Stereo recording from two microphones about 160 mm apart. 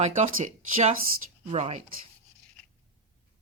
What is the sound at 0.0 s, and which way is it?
Speech, 50° right (ahead or behind).